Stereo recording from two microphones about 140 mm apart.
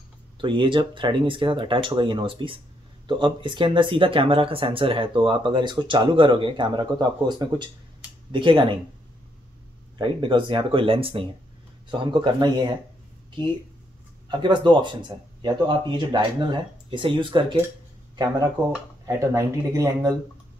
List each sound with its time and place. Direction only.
0.4 s speech: 35° right (ahead or behind)
9.9 s speech: 35° right (ahead or behind)
14.3 s speech: 35° right (ahead or behind)